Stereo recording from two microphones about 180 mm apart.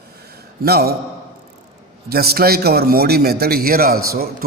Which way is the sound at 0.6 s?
60° right (ahead or behind).